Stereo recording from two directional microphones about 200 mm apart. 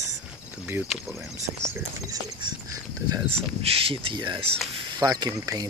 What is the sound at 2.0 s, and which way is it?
Speech, 20° right (ahead or behind).